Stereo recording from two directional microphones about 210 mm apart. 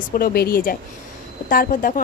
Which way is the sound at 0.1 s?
45° left (ahead or behind).